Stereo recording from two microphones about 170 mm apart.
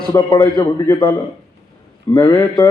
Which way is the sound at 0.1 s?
20° left (ahead or behind).